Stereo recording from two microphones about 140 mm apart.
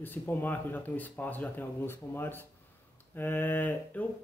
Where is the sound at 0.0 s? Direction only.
15° left (ahead or behind).